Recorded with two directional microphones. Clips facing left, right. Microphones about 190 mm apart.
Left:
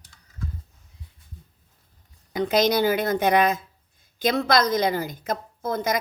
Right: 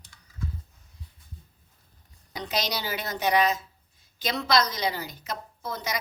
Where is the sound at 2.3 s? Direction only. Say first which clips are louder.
Left 10 dB; 50° left (ahead or behind).